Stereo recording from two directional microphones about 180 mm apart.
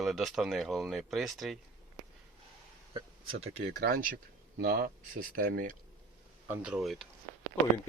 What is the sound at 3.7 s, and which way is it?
Speech, 60° right (ahead or behind).